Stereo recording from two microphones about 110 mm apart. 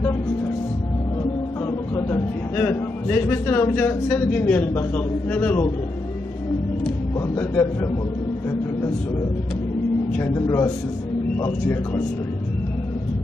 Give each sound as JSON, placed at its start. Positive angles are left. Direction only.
{"t": 2.6, "sound": "a man's voice", "side_deg": 20}
{"t": 7.2, "sound": "a man's voice", "side_deg": 20}
{"t": 10.1, "sound": "speech", "side_deg": 25}